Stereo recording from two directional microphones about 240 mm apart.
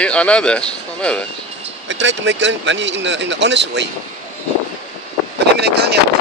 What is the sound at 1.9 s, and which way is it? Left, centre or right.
Speech, right.